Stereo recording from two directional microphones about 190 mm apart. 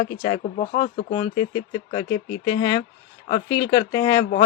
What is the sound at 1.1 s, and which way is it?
Speech, 20° left (ahead or behind).